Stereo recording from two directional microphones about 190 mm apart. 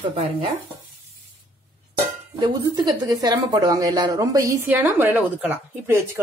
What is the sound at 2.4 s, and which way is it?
Speech, 20° right (ahead or behind).